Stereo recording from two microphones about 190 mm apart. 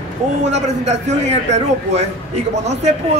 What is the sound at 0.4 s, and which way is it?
A man's voice, 35° right (ahead or behind).